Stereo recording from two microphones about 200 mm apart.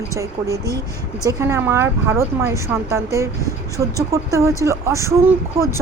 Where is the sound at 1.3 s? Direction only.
15° right (ahead or behind).